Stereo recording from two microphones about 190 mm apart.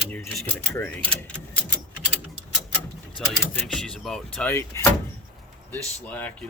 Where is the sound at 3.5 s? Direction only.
5° left (ahead or behind).